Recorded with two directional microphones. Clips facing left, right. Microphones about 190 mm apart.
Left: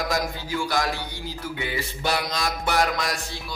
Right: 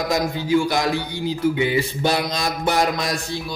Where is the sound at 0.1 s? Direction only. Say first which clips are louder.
Right 8 dB; 20° right (ahead or behind).